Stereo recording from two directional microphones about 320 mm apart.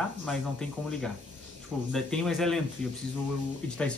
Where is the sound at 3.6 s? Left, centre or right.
Centre.